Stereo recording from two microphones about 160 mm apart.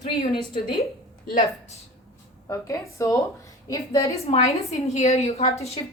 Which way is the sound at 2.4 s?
20° left (ahead or behind).